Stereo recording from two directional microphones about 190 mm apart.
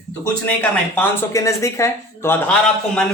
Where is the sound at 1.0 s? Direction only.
15° left (ahead or behind).